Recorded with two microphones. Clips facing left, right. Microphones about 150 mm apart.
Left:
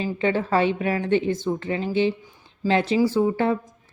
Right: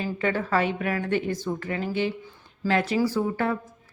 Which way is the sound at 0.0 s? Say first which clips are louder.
Left 3 dB; 20° left (ahead or behind).